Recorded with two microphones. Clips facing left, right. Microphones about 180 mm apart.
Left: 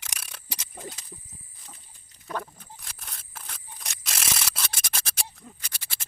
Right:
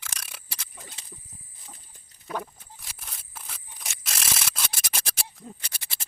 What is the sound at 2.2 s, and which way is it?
Dog, 5° right (ahead or behind).